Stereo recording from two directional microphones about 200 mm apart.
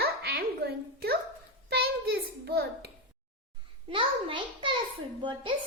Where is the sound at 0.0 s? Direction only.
50° right (ahead or behind).